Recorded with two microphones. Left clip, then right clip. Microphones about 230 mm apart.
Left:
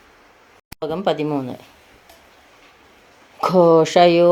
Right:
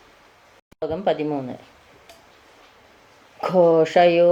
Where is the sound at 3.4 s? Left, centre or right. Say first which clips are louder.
Left 3 dB; left.